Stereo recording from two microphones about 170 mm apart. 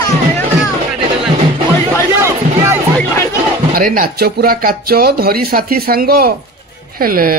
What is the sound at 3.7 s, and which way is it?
Speech, 55° right (ahead or behind).